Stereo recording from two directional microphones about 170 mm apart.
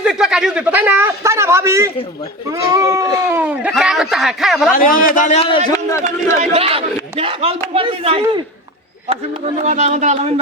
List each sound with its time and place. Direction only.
0.0 s a man's voice: 5° right (ahead or behind)
4.7 s a man's voice: 55° left (ahead or behind); by 5.5 s 40° left (ahead or behind)
5.7 s a man's voice: 15° left (ahead or behind)
6.4 s a man's voice: 35° right (ahead or behind)
9.6 s speech: 45° right (ahead or behind)